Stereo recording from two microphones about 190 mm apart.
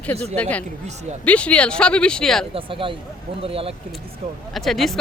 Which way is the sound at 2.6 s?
30° right (ahead or behind).